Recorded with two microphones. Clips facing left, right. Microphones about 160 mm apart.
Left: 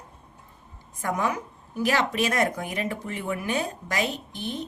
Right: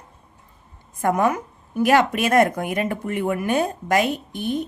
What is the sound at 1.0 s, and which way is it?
A woman's voice, 55° right (ahead or behind).